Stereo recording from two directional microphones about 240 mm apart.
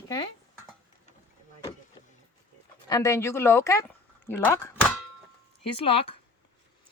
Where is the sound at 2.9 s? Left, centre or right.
Centre.